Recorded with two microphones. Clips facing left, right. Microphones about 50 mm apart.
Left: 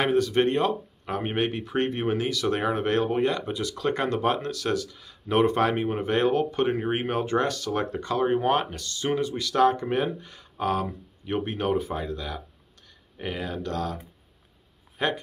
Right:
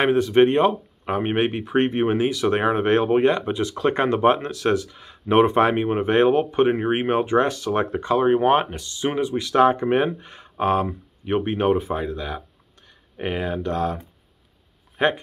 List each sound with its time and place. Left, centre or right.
0.0 s speech: right